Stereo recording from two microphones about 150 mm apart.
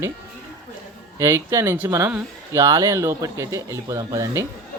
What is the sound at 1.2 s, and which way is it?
Speech, 20° right (ahead or behind).